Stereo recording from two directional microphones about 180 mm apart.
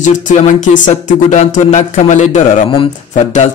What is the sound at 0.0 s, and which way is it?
Speech, 45° left (ahead or behind).